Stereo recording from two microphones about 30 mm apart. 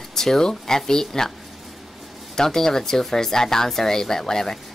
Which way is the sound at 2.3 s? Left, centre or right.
Centre.